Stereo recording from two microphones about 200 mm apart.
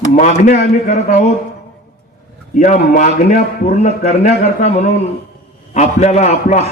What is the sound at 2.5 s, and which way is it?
A man's voice, 35° left (ahead or behind).